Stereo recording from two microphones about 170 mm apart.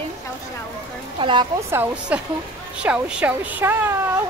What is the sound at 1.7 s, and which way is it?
Speech, 5° right (ahead or behind).